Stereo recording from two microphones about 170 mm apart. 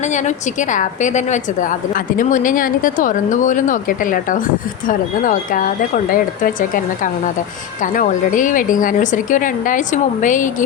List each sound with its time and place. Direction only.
0.0 s a woman's voice: 45° left (ahead or behind)